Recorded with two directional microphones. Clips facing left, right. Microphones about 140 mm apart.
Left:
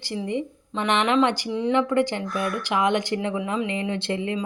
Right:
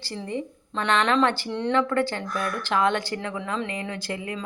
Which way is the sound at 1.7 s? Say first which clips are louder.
Left 2 dB; 15° left (ahead or behind).